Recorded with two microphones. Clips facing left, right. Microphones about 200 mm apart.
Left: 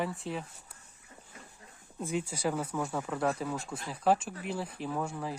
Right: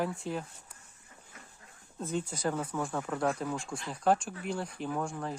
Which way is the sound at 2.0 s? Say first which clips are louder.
Left 1 dB; 10° left (ahead or behind).